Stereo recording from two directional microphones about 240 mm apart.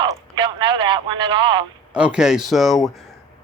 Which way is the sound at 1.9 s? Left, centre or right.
Centre.